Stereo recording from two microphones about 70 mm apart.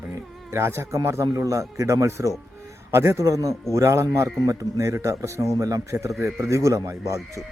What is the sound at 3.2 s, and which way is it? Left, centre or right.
Speech, right.